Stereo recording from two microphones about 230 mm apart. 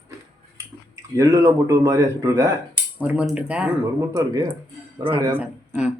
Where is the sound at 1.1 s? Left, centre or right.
Centre.